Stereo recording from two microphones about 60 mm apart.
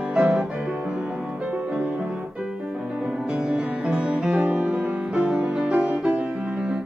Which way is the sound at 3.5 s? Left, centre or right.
Centre.